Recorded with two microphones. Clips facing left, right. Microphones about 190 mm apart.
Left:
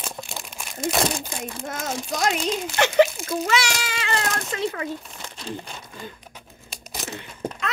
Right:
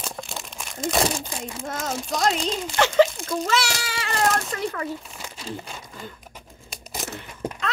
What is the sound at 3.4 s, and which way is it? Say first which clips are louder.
Speech: left 1 dB; 60° left (ahead or behind).